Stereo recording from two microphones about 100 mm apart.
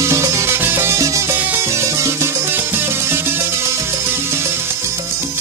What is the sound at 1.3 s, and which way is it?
Music, 20° right (ahead or behind).